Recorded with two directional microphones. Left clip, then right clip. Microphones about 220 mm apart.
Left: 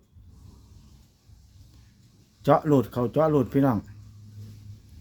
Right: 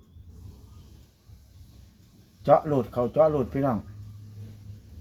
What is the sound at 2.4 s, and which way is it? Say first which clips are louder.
Speech: even; 50° left (ahead or behind).